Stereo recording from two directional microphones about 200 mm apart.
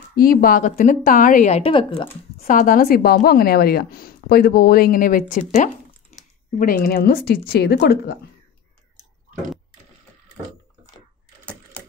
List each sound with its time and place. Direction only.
0.1 s a woman's voice: 45° left (ahead or behind); by 2.0 s 25° left (ahead or behind)
2.3 s a woman's voice: 40° left (ahead or behind)